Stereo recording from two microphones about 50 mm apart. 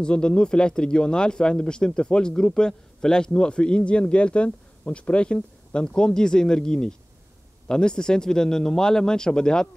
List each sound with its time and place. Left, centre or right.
0.0 s speech: centre